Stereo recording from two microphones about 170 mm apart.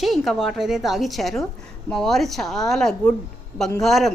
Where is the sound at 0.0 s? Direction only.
Centre (ahead or behind).